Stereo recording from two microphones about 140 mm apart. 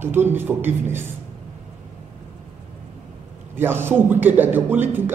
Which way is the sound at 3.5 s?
15° right (ahead or behind).